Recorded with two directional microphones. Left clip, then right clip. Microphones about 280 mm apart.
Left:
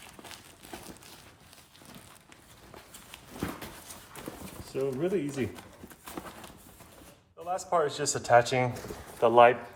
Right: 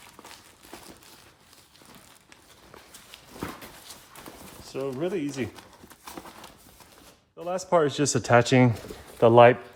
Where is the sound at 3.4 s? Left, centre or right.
Centre.